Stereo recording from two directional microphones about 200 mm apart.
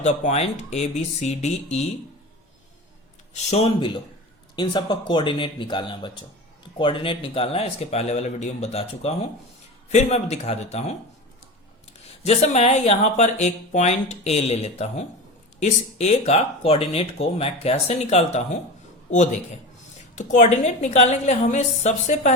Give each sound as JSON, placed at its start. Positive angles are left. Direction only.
{"t": 0.0, "sound": "speech", "side_deg": 35}
{"t": 3.3, "sound": "speech", "side_deg": 30}
{"t": 12.2, "sound": "speech", "side_deg": 30}